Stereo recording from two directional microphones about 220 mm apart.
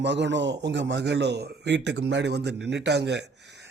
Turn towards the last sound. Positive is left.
turn(degrees=-50)  # may be behind; listen again after turning